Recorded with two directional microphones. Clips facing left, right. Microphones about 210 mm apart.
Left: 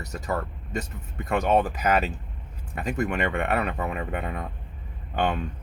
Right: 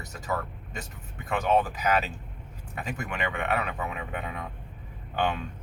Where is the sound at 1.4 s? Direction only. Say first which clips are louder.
Left 1 dB; 45° left (ahead or behind).